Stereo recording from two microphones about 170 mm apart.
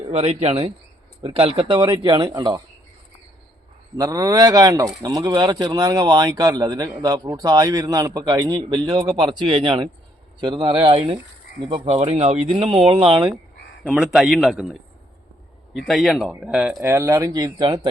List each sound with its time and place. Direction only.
0.0 s speech: 35° right (ahead or behind)
3.9 s speech: 20° right (ahead or behind)
13.8 s a man's voice: 5° right (ahead or behind); by 17.7 s 25° right (ahead or behind)